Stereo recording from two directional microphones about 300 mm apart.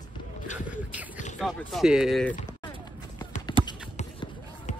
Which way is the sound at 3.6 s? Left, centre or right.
Centre.